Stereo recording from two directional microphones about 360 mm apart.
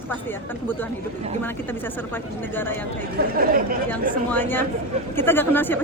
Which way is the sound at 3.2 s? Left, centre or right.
Right.